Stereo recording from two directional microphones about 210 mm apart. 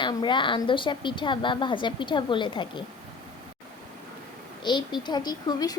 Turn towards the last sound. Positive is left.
turn(degrees=20)  # may be behind; listen again after turning